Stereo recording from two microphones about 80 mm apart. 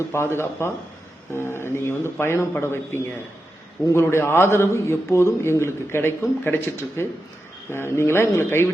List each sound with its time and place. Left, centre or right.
0.1 s a man's voice: left